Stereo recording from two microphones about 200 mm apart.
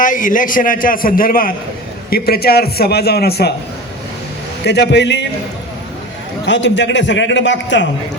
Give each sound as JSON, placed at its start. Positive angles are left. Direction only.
{"t": 0.0, "sound": "a man's voice", "side_deg": 40}
{"t": 4.6, "sound": "a man's voice", "side_deg": 60}
{"t": 6.4, "sound": "a man's voice", "side_deg": 65}